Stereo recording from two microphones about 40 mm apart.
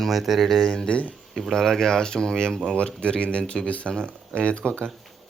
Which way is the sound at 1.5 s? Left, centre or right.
Centre.